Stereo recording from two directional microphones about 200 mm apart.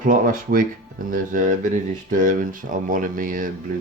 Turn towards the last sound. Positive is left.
turn(degrees=-40)  # may be behind; listen again after turning